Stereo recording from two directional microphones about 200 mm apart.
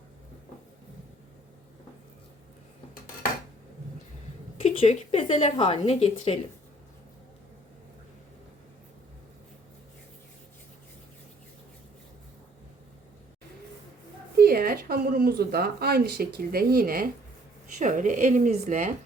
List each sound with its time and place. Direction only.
4.6 s speech: 30° left (ahead or behind)
14.3 s speech: 50° right (ahead or behind)